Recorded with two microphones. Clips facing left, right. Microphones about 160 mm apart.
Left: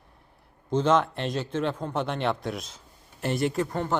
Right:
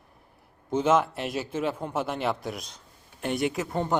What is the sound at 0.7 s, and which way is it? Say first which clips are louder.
A man's voice: even; 10° right (ahead or behind).